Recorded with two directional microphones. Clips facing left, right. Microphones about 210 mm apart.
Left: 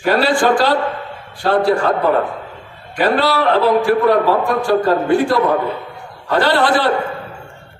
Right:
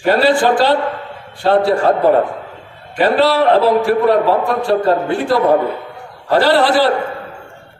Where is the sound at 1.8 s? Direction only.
30° right (ahead or behind).